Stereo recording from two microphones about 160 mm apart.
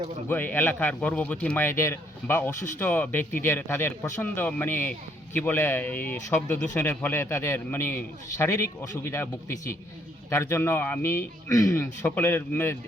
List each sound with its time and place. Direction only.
0.3 s speech: 10° left (ahead or behind)